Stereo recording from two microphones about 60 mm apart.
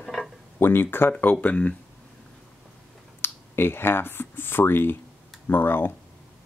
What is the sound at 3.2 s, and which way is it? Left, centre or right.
Speech, left.